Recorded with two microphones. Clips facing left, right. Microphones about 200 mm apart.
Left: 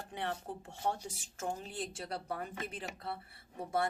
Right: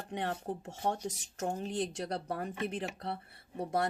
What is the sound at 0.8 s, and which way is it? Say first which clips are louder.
Speech: right 2 dB; 60° right (ahead or behind).